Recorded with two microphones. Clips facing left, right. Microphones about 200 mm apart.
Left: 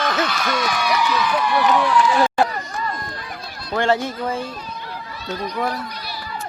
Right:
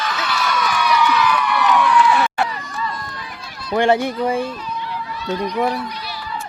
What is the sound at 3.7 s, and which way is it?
Speech, 15° right (ahead or behind).